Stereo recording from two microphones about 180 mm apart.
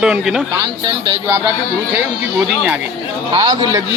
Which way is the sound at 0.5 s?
20° right (ahead or behind).